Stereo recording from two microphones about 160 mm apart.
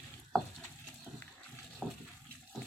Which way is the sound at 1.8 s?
Centre (ahead or behind).